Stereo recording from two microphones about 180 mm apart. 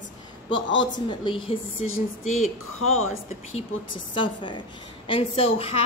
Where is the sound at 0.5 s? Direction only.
90° left.